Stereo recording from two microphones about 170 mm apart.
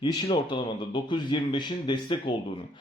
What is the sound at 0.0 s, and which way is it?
Speech, 25° left (ahead or behind).